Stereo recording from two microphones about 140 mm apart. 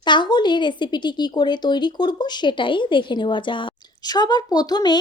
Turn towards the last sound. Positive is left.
turn(degrees=30)  # may be behind; listen again after turning